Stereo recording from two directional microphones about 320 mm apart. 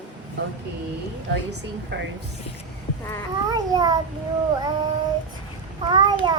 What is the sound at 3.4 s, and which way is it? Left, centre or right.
Child singing, centre.